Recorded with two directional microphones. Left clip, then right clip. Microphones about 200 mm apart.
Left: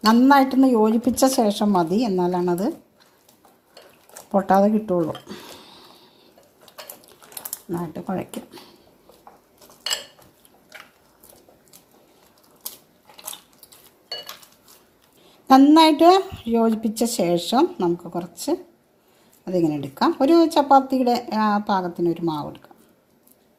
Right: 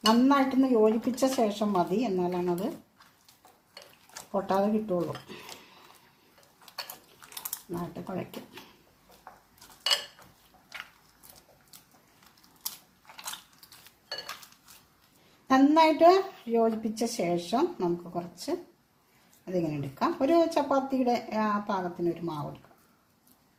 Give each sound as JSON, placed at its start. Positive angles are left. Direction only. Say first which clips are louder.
{"t": 0.0, "sound": "a woman's voice", "louder": "left 8 dB", "side_deg": 45}
{"t": 4.3, "sound": "a woman's voice", "louder": "left 10 dB", "side_deg": 45}
{"t": 15.4, "sound": "a woman's voice", "louder": "left 8 dB", "side_deg": 45}